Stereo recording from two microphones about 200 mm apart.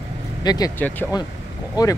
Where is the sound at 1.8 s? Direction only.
20° left (ahead or behind).